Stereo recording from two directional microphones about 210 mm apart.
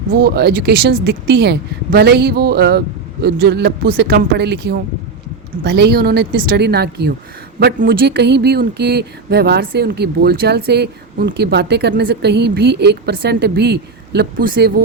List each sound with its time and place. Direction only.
0.3 s speech: 50° right (ahead or behind)